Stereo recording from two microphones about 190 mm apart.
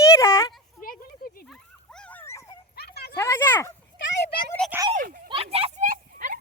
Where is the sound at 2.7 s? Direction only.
55° left (ahead or behind).